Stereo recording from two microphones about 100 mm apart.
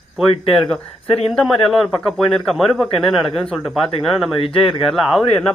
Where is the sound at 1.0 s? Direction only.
90° left.